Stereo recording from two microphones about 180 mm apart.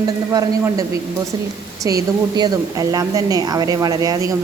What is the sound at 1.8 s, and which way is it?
A woman's voice, 20° right (ahead or behind).